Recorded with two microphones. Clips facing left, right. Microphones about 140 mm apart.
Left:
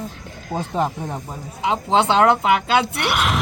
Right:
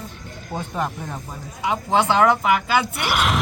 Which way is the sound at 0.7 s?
25° left (ahead or behind).